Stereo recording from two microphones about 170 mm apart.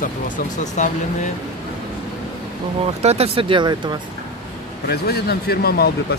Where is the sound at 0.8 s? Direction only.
45° left (ahead or behind).